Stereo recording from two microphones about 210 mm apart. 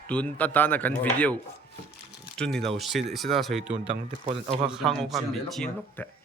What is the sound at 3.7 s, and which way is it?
Speech, 30° right (ahead or behind).